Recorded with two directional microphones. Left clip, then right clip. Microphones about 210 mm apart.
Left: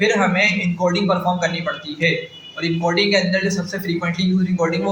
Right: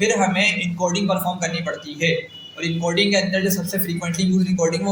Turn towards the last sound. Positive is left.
turn(degrees=-25)  # may be behind; listen again after turning